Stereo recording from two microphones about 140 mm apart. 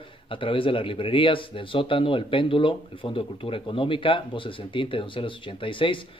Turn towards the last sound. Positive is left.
turn(degrees=35)  # may be behind; listen again after turning